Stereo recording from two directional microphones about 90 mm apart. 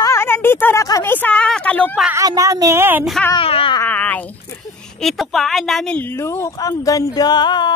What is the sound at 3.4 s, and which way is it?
Speech, 85° left.